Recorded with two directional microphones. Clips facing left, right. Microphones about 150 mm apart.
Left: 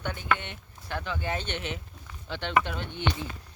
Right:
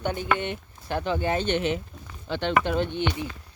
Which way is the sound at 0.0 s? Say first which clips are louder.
Right 4 dB; 20° right (ahead or behind).